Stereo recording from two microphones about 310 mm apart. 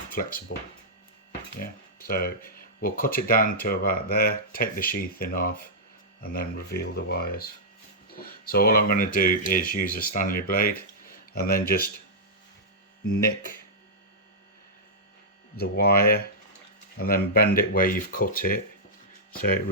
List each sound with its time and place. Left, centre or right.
0.1 s speech: left
1.5 s speech: left
15.5 s speech: left